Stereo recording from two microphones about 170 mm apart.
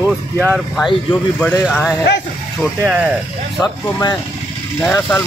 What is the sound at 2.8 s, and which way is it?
Speech, 10° right (ahead or behind).